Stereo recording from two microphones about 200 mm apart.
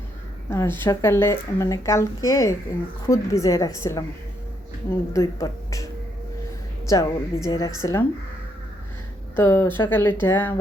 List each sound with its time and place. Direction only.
0.5 s speech: 15° left (ahead or behind)
5.1 s speech: 15° left (ahead or behind)
6.8 s speech: 15° left (ahead or behind)
9.3 s speech: 15° left (ahead or behind)